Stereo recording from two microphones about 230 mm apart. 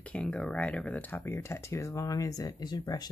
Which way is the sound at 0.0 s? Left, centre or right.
Centre.